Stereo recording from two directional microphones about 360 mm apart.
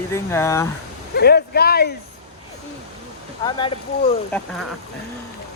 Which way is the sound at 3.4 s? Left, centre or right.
Centre.